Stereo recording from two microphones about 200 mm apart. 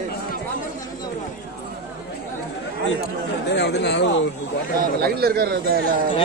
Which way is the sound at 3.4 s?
60° left (ahead or behind).